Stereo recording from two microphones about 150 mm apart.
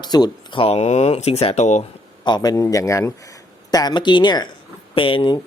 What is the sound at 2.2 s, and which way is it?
Speech, 30° left (ahead or behind).